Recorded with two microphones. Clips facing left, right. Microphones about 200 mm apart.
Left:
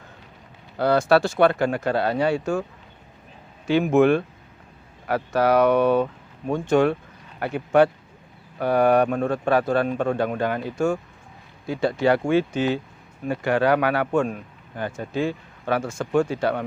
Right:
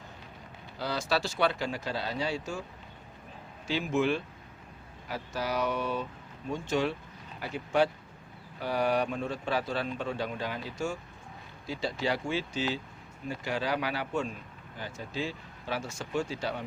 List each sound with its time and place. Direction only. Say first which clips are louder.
0.8 s a man's voice: left 13 dB; 55° left (ahead or behind)
3.7 s a man's voice: left 11 dB; 60° left (ahead or behind)